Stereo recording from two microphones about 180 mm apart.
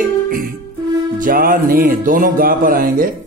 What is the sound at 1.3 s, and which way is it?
Speech, 50° right (ahead or behind).